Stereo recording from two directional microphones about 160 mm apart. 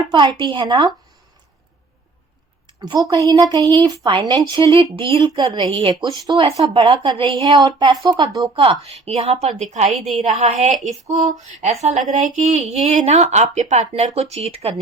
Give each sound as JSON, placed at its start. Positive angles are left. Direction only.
{"t": 0.1, "sound": "speech", "side_deg": -30}
{"t": 2.8, "sound": "a woman's voice", "side_deg": -25}
{"t": 11.8, "sound": "speech", "side_deg": -50}